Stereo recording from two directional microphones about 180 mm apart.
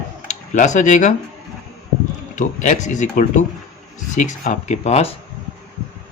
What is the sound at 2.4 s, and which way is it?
A man's voice, 40° left (ahead or behind).